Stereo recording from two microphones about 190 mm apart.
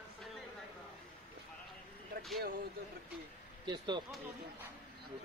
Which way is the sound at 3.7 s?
25° right (ahead or behind).